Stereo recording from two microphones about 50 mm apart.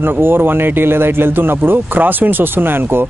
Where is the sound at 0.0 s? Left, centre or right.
Right.